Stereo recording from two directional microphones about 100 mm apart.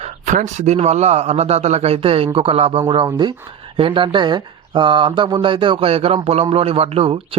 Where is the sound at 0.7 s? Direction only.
90° right; by 2.8 s 75° right (ahead or behind).